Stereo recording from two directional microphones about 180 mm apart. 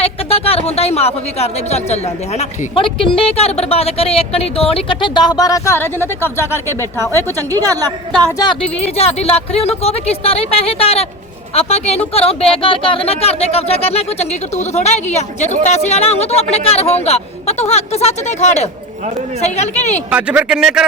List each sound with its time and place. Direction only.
0.0 s speech: 35° left (ahead or behind); by 7.3 s 15° left (ahead or behind)
7.3 s a woman's voice: 20° right (ahead or behind)
8.4 s speech: 30° left (ahead or behind)
20.1 s speech: 5° right (ahead or behind)